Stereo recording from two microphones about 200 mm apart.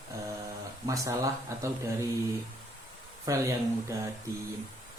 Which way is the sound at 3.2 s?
15° right (ahead or behind).